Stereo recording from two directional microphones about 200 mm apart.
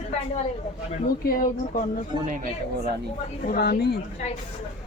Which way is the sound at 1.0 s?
45° left (ahead or behind).